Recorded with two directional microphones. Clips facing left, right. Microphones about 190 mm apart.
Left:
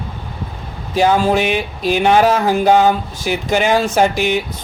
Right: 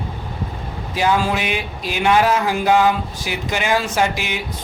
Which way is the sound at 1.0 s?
40° left (ahead or behind).